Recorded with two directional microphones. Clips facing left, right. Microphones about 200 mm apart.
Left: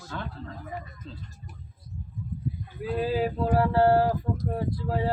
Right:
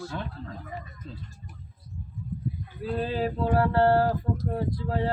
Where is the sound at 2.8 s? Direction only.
10° left (ahead or behind).